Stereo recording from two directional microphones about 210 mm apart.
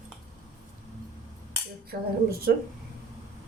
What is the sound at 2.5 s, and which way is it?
Speech, 45° right (ahead or behind).